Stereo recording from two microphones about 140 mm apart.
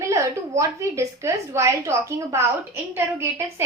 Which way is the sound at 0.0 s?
20° right (ahead or behind).